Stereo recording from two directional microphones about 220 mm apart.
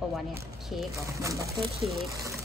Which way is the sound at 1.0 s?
15° right (ahead or behind).